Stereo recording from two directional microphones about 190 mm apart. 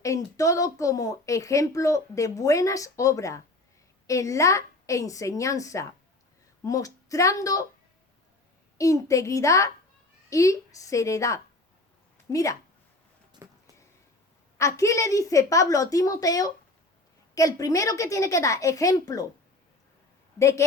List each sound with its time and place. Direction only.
0.0 s speech: 15° left (ahead or behind)
8.8 s speech: 15° left (ahead or behind)
14.6 s speech: 15° left (ahead or behind)
20.4 s speech: 15° left (ahead or behind)